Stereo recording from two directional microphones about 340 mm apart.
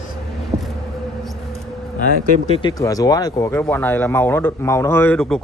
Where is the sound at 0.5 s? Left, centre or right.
Centre.